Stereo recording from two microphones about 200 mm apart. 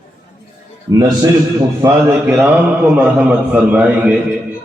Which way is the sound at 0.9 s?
15° right (ahead or behind).